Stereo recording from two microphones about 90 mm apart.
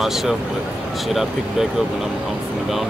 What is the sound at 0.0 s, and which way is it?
Speech, 5° right (ahead or behind).